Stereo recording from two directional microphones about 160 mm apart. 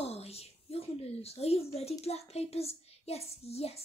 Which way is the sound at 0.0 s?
40° left (ahead or behind).